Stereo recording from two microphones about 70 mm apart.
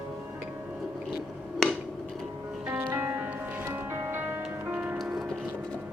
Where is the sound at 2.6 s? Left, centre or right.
Right.